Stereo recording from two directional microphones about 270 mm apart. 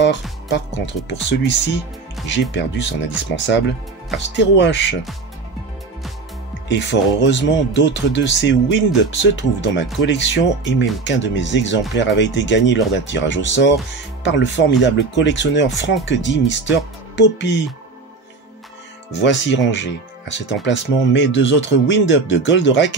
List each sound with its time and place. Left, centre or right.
0.0 s speech: left
3.4 s speech: left
6.7 s speech: left
19.2 s speech: left